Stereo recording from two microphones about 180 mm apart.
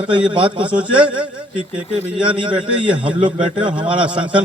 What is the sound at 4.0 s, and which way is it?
Speech, 5° right (ahead or behind).